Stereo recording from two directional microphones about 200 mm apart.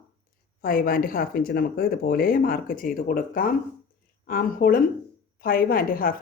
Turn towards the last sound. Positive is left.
turn(degrees=45)  # may be behind; listen again after turning